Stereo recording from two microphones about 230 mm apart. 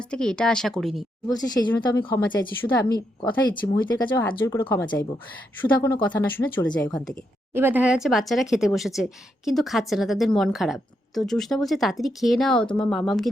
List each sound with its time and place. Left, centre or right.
0.1 s speech: centre
1.3 s a woman's voice: centre
4.1 s speech: centre
7.5 s speech: centre